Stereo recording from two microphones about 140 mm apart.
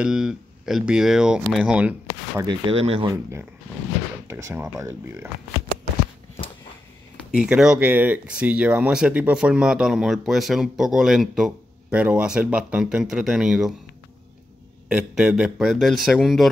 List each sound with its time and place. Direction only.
0.0 s speech: 5° right (ahead or behind)
2.4 s speech: 40° right (ahead or behind)
3.1 s speech: 20° right (ahead or behind)
7.3 s speech: 5° right (ahead or behind)
14.9 s speech: 5° right (ahead or behind)